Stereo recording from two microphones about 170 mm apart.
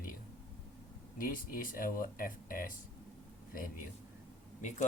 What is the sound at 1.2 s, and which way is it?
A man's voice, 55° left (ahead or behind).